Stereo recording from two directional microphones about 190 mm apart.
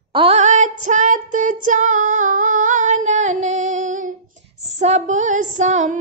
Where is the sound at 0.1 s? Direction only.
30° right (ahead or behind).